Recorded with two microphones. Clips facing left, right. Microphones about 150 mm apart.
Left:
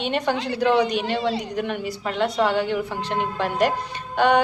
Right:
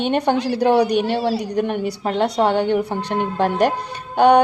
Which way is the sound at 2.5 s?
55° right (ahead or behind).